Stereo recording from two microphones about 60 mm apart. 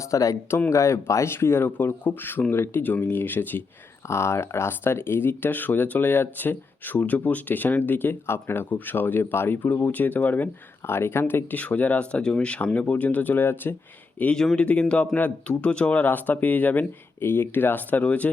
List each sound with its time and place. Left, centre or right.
0.0 s speech: left
4.0 s speech: left
10.8 s speech: left
11.5 s speech: left
14.3 s speech: centre
17.2 s speech: left